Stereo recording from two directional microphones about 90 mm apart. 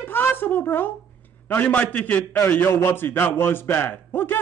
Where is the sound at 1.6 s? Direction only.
15° left (ahead or behind).